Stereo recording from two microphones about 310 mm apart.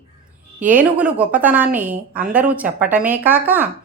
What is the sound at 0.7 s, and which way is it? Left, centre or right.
A woman's voice, centre.